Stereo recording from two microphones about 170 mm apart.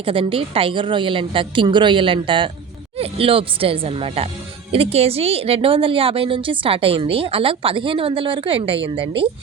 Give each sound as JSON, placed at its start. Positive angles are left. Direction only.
{"t": 0.0, "sound": "a woman's voice", "side_deg": -30}